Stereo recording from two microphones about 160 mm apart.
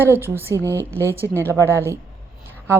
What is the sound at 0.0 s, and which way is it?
Speech, 15° right (ahead or behind).